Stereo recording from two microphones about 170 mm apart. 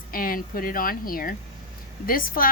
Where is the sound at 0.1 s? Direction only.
55° left (ahead or behind).